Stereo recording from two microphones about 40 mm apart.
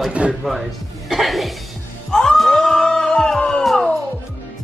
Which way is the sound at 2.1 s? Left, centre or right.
Centre.